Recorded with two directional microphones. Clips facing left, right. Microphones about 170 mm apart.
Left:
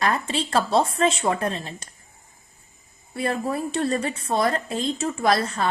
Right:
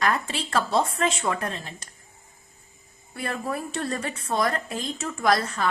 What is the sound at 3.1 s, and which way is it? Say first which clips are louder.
A woman's voice: left 5 dB; 25° left (ahead or behind).